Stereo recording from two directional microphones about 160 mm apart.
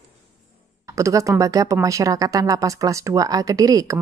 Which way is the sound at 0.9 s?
20° right (ahead or behind).